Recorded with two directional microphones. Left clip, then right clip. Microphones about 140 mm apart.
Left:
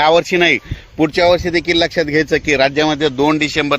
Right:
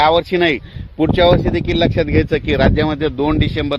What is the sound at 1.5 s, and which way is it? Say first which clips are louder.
A man's voice: left 2 dB; 45° left (ahead or behind).